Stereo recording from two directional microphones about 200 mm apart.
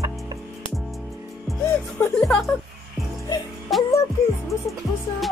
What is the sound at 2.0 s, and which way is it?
Music, centre (ahead or behind).